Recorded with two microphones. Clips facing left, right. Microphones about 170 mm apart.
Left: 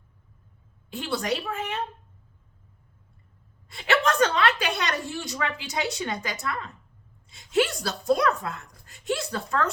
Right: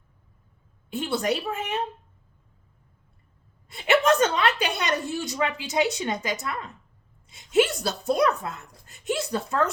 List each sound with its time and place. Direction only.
0.9 s a woman's voice: 20° right (ahead or behind)
3.7 s a woman's voice: 20° right (ahead or behind)